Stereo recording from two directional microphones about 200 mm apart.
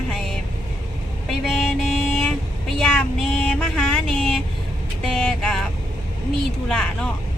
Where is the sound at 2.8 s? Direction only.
5° left (ahead or behind).